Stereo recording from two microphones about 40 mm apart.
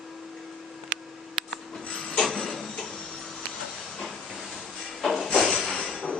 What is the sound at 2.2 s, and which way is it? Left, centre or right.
Tick-tock, centre.